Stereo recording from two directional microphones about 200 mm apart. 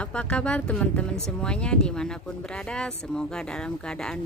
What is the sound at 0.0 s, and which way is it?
Speech, 5° left (ahead or behind).